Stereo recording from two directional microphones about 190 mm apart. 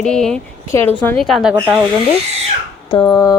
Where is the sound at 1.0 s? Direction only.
5° left (ahead or behind).